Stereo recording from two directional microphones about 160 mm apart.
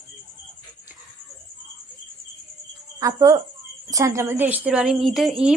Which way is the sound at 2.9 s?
20° right (ahead or behind).